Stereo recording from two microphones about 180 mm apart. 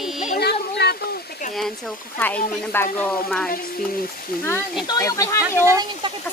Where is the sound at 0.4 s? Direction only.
65° left (ahead or behind).